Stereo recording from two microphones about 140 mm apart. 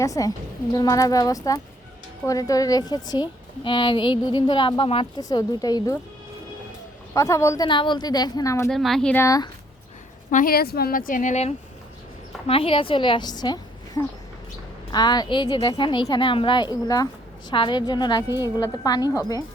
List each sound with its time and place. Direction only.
0.0 s a woman's voice: 25° left (ahead or behind)
7.1 s a woman's voice: 20° left (ahead or behind)
7.7 s a woman's voice: 35° left (ahead or behind)
8.7 s speech: centre (ahead or behind)
9.1 s a woman's voice: 25° left (ahead or behind)
10.3 s speech: 90° left; by 11.5 s 55° left (ahead or behind)
12.5 s a woman's voice: 40° left (ahead or behind)
18.3 s a woman's voice: 20° right (ahead or behind)
18.6 s a woman's voice: 25° left (ahead or behind)